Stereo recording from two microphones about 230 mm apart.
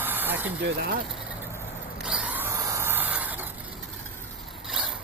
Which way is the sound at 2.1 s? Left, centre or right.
Centre.